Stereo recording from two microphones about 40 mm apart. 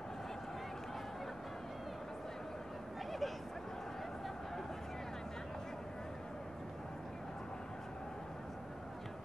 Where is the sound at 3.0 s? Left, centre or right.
Centre.